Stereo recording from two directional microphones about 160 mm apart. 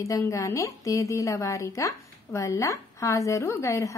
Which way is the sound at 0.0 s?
20° left (ahead or behind).